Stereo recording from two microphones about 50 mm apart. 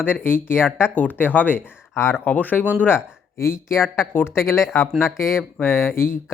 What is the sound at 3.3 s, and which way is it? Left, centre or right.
Speech, left.